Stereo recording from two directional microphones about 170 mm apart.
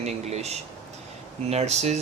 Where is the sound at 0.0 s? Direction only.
40° right (ahead or behind).